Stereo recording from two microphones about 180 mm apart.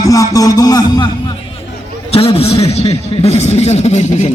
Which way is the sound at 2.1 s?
35° left (ahead or behind).